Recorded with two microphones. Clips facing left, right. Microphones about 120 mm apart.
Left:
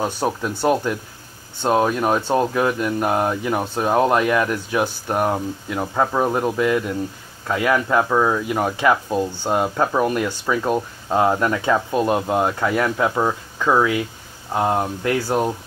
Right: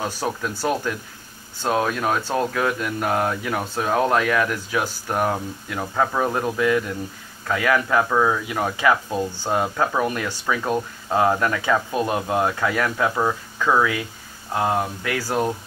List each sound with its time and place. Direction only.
0.0 s speech: 20° left (ahead or behind)